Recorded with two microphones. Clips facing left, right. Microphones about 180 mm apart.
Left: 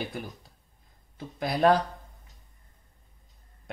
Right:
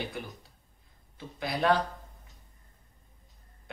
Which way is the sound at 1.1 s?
45° left (ahead or behind).